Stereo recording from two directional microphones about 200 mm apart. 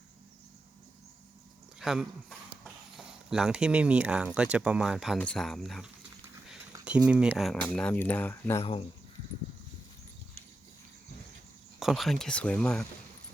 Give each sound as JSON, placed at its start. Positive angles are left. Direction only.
{"t": 1.8, "sound": "speech", "side_deg": 0}
{"t": 6.7, "sound": "a sound", "side_deg": -15}
{"t": 7.1, "sound": "speech", "side_deg": -5}
{"t": 8.6, "sound": "speech", "side_deg": 30}
{"t": 11.8, "sound": "speech", "side_deg": 0}